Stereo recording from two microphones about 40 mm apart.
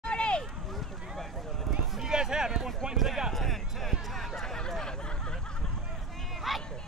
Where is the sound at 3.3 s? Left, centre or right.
Centre.